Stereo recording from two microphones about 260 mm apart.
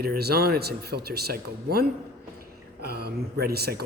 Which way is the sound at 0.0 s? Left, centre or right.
Right.